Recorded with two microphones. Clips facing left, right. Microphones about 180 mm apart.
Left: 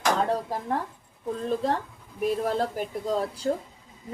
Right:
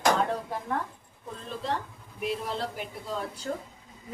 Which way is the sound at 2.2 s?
45° left (ahead or behind).